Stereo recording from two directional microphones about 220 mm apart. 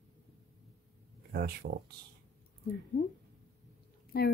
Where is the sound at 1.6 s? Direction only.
45° right (ahead or behind).